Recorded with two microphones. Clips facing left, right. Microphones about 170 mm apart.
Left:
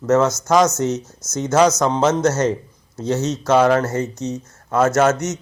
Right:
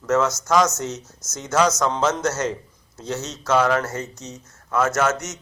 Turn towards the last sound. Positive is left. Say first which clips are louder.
# left 5 dB
turn(degrees=30)  # may be behind; listen again after turning